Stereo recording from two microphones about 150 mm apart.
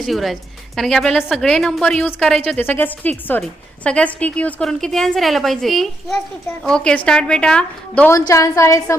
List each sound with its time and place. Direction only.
0.0 s a woman's voice: centre (ahead or behind)
8.1 s a woman's voice: 20° left (ahead or behind)